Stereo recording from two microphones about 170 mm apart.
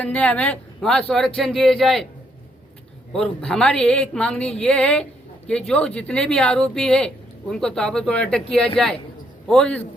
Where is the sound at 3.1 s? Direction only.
5° left (ahead or behind).